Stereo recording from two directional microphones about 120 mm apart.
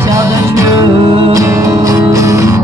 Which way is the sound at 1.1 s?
55° right (ahead or behind).